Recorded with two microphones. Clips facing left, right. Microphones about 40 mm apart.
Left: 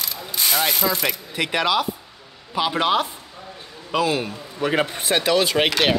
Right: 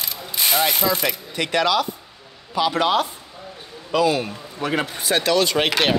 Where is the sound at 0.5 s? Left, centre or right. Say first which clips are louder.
Right 2 dB; centre.